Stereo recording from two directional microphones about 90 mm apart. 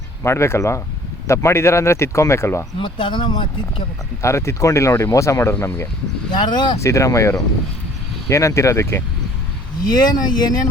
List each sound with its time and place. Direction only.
0.2 s speech: 30° left (ahead or behind)
2.7 s speech: 65° left (ahead or behind)
4.2 s speech: 30° left (ahead or behind)
6.3 s speech: 55° left (ahead or behind)
6.8 s speech: 35° left (ahead or behind)
9.8 s speech: 50° left (ahead or behind)